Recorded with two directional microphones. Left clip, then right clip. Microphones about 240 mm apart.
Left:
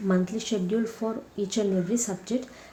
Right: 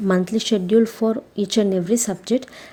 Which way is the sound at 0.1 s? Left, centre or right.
Right.